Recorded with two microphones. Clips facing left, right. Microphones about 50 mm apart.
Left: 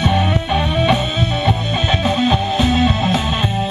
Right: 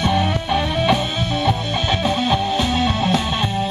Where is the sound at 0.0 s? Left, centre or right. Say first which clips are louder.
Left 2 dB; centre.